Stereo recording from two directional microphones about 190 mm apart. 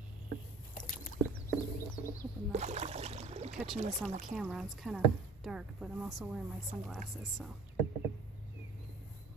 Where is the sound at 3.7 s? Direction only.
35° right (ahead or behind).